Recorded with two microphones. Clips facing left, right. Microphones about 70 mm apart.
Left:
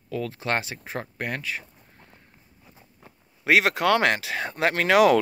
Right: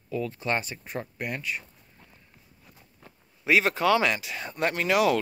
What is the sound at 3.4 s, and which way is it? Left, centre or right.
Speech, left.